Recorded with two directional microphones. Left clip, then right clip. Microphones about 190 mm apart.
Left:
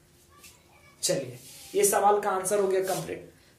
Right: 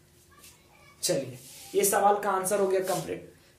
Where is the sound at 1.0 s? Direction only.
25° right (ahead or behind).